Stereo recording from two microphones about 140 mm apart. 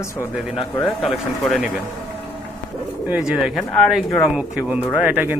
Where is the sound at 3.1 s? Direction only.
10° right (ahead or behind).